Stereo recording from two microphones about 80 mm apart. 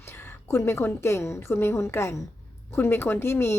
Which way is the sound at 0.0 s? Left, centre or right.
Left.